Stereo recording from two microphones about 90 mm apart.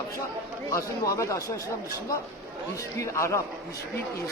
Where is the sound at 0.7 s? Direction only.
35° left (ahead or behind).